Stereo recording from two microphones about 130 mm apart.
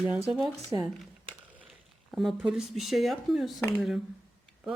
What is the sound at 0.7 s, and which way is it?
Speech, 25° right (ahead or behind).